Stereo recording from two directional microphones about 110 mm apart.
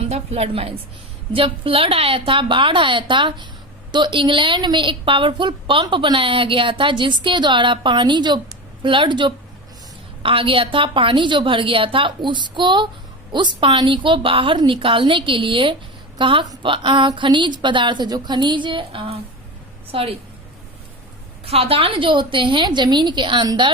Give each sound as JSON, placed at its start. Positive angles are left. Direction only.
{"t": 0.1, "sound": "a woman's voice", "side_deg": -70}
{"t": 21.4, "sound": "a woman's voice", "side_deg": -60}